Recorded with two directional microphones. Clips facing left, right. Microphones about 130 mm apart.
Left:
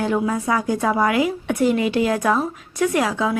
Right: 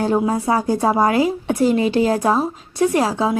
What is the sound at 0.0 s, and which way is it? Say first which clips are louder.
A woman's voice: right 3 dB; 35° right (ahead or behind).